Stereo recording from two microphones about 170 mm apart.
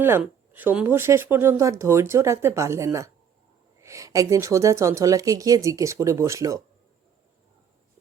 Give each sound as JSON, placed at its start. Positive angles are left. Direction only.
{"t": 0.2, "sound": "speech", "side_deg": -10}